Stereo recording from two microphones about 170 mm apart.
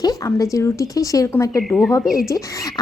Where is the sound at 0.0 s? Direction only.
20° left (ahead or behind).